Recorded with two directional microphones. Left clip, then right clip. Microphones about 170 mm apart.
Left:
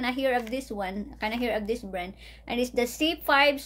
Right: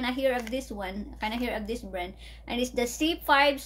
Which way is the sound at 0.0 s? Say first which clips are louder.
Left 1 dB; 40° left (ahead or behind).